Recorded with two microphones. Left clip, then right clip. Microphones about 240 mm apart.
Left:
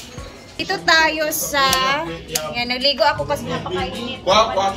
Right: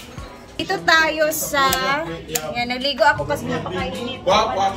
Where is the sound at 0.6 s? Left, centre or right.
Centre.